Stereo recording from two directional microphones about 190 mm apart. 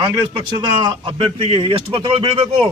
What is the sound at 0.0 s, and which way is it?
A man's voice, 20° right (ahead or behind).